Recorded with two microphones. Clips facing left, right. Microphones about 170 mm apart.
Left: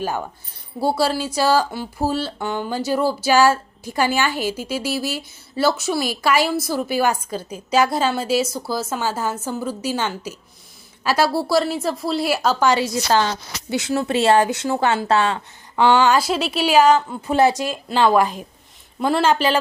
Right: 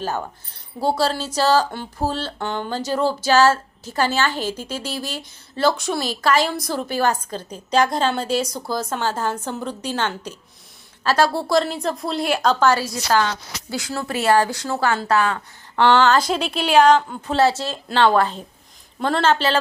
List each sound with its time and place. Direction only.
0.8 s speech: 10° left (ahead or behind)
15.7 s speech: 10° left (ahead or behind)